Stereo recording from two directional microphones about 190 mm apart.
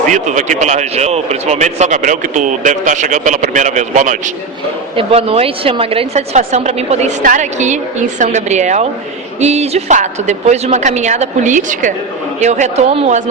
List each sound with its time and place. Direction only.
0.0 s speech: 40° right (ahead or behind)